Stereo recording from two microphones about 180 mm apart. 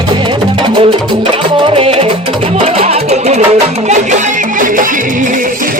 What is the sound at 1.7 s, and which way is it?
Music, 35° right (ahead or behind).